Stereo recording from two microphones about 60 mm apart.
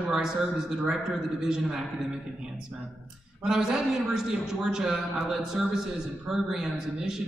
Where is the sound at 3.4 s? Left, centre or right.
Centre.